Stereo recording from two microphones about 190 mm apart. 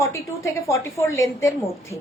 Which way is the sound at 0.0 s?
15° left (ahead or behind).